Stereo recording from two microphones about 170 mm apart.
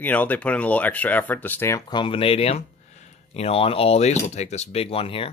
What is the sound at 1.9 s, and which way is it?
Speech, 30° left (ahead or behind).